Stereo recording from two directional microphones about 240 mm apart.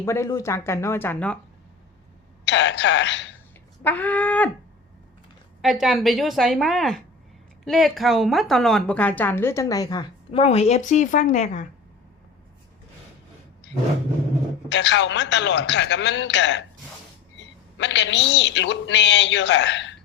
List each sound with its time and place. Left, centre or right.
0.0 s speech: centre
2.5 s a woman's voice: left
3.8 s speech: centre
5.6 s a woman's voice: centre; by 11.6 s left
14.7 s a woman's voice: left
17.7 s a woman's voice: left